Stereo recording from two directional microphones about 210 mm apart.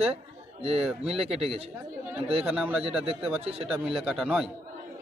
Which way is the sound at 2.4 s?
5° right (ahead or behind).